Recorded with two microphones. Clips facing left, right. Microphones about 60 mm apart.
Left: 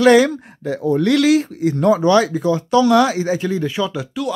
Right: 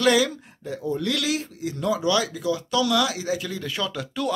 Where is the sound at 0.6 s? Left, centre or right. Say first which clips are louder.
Left 10 dB; left.